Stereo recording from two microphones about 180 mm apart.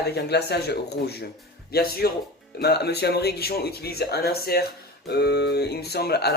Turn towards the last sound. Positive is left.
turn(degrees=65)  # may be behind; listen again after turning